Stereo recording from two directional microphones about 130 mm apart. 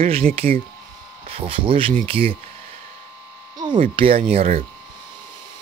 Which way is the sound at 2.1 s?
45° right (ahead or behind).